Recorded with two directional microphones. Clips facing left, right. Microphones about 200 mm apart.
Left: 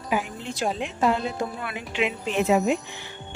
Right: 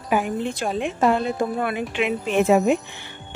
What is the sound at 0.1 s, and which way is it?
Speech, 55° right (ahead or behind).